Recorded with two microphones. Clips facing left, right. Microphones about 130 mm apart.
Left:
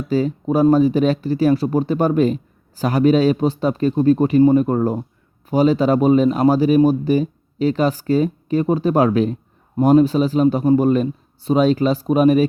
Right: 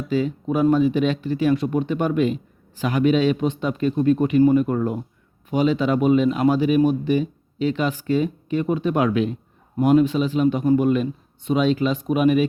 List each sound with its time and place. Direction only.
0.1 s a man's voice: 40° left (ahead or behind)